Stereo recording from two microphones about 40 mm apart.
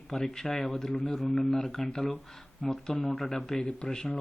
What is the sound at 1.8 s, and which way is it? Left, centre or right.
Speech, left.